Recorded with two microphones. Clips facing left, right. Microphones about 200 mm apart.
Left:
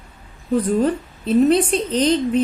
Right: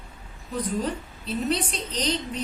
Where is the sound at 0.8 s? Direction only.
50° left (ahead or behind).